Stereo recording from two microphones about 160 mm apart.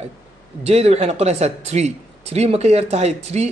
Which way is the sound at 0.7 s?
40° right (ahead or behind).